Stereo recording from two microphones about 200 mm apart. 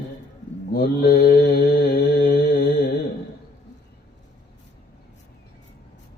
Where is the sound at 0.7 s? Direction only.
55° left (ahead or behind).